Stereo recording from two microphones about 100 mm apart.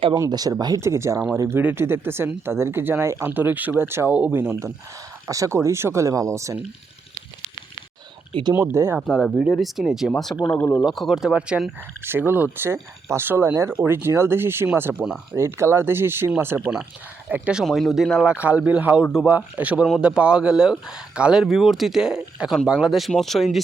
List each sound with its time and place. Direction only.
0.1 s speech: 40° right (ahead or behind)
0.8 s speech: 30° right (ahead or behind)
8.3 s speech: 55° right (ahead or behind)
8.5 s speech: 25° right (ahead or behind)
9.1 s speech: 5° left (ahead or behind)
10.4 s speech: 15° left (ahead or behind)
10.8 s speech: centre (ahead or behind)
12.0 s speech: 20° right (ahead or behind)
17.7 s speech: centre (ahead or behind)
18.3 s speech: 15° right (ahead or behind)